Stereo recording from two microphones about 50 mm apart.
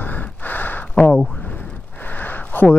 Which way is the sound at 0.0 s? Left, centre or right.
Left.